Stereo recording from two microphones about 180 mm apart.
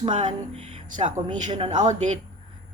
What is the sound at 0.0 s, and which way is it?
Speech, 40° right (ahead or behind).